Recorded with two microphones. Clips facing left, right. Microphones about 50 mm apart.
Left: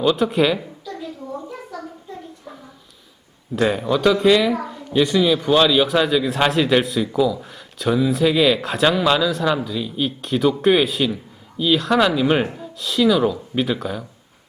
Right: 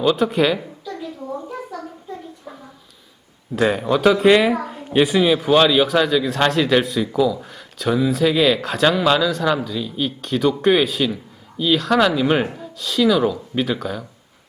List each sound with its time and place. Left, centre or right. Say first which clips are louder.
0.0 s a man's voice: even; centre
0.6 s a sound: right 1 dB; centre
3.5 s speech: right 1 dB; centre
4.2 s speech: right 2 dB; right; by 5.8 s centre
5.8 s a man's voice: right 1 dB; centre